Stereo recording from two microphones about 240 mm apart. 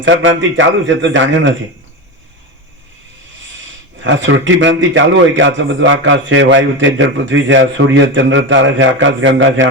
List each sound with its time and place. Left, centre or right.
0.0 s a man's voice: right
4.0 s a man's voice: right